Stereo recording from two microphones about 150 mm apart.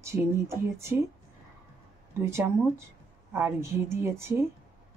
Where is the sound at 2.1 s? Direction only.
15° right (ahead or behind).